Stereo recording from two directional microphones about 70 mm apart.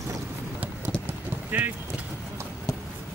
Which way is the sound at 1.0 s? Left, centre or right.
Right.